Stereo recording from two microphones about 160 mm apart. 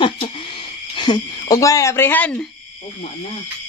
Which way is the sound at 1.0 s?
30° left (ahead or behind).